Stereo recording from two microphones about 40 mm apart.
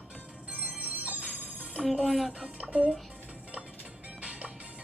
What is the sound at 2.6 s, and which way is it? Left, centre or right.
Speech, right.